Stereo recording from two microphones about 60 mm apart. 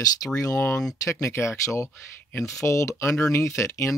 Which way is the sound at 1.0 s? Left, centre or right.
Left.